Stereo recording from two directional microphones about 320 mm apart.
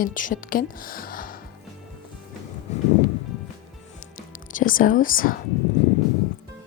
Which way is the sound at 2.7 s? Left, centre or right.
Left.